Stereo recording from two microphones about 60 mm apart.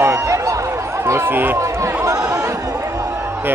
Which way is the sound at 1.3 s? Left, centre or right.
Right.